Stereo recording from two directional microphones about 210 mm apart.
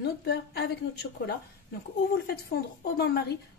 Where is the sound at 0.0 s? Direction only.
50° left (ahead or behind).